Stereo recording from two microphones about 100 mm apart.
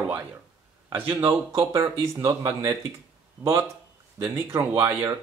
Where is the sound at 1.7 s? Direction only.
30° right (ahead or behind).